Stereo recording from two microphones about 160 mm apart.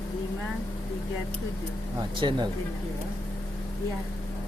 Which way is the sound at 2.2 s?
30° right (ahead or behind).